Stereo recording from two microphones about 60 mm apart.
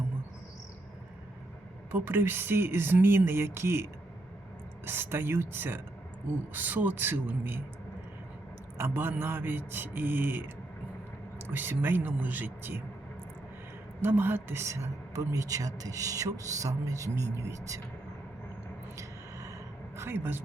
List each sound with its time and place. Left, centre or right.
1.9 s speech: right
4.9 s speech: right
8.8 s speech: right
14.0 s speech: right
14.6 s speech: right
18.9 s a sound: right
20.0 s speech: right